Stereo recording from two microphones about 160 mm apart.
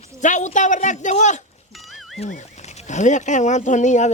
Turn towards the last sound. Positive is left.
turn(degrees=50)  # may be behind; listen again after turning